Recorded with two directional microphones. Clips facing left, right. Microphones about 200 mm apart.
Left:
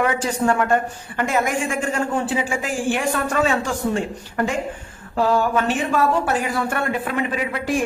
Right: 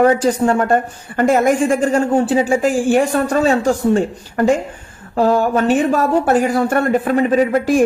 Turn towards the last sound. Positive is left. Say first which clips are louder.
# right 10 dB
turn(degrees=-40)  # may be behind; listen again after turning